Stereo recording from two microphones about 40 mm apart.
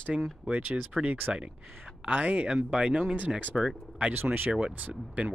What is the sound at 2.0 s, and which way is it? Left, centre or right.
Speech, right.